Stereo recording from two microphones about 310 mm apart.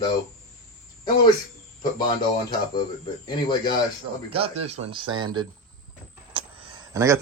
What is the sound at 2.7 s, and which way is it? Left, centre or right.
Speech, centre.